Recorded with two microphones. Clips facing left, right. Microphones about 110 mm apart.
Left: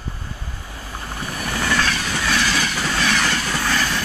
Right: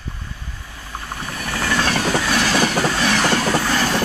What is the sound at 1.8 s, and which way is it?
Train, 45° right (ahead or behind).